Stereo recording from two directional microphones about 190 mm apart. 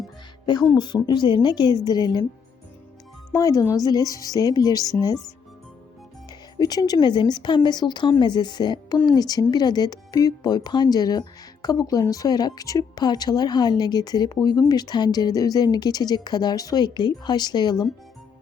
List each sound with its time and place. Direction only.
1.0 s speech: 25° left (ahead or behind)
3.3 s speech: 15° left (ahead or behind)
6.6 s speech: 20° left (ahead or behind)